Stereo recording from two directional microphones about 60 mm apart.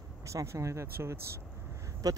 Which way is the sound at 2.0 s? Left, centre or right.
Right.